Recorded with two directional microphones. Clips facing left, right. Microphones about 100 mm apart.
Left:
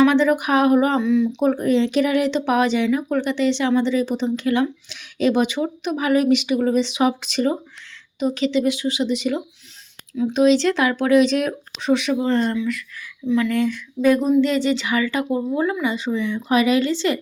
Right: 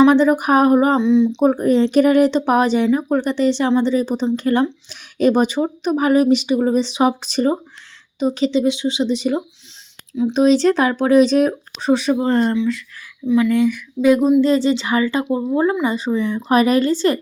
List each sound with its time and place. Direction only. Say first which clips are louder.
0.0 s speech: right 3 dB; 35° right (ahead or behind)
0.9 s speech: right 4 dB; 25° right (ahead or behind)
13.2 s speech: right 4 dB; 15° right (ahead or behind)
14.4 s speech: right 4 dB; 30° right (ahead or behind)